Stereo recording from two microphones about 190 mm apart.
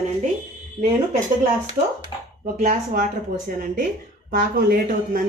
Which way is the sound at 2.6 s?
40° right (ahead or behind).